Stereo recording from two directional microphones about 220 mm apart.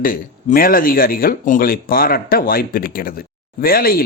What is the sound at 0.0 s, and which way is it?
Speech, 40° left (ahead or behind).